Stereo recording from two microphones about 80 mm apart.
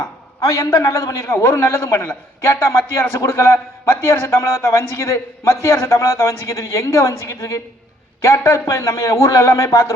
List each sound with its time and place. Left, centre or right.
0.0 s a man's voice: left